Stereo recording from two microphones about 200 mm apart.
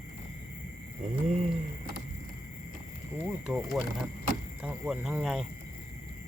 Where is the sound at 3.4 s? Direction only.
Centre (ahead or behind).